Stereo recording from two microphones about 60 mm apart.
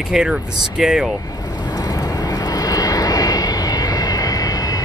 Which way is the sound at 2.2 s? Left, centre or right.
Left.